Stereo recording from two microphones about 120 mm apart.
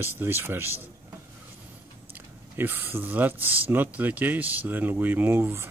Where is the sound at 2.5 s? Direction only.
15° right (ahead or behind).